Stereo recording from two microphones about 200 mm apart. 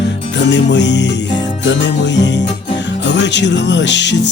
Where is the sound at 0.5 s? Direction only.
60° left (ahead or behind).